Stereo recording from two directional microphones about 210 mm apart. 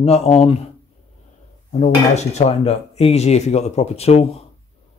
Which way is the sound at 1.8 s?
30° left (ahead or behind).